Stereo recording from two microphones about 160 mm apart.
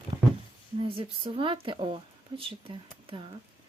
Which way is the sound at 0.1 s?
35° right (ahead or behind).